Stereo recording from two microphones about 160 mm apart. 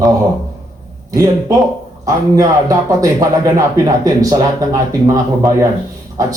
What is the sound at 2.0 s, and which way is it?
Speech, 20° right (ahead or behind).